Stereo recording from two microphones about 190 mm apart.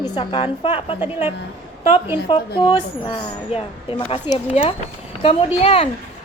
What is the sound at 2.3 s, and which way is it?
A woman's voice, 25° left (ahead or behind).